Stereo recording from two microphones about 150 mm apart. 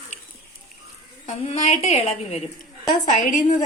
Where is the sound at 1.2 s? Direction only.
45° left (ahead or behind).